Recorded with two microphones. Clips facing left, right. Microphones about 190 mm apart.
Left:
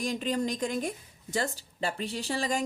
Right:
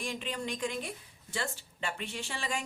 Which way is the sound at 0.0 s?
40° left (ahead or behind).